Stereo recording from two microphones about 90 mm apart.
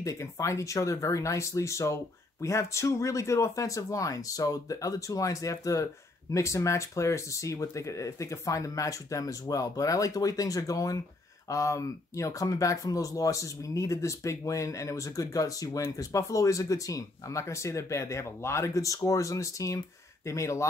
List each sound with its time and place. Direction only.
0.0 s speech: 35° left (ahead or behind)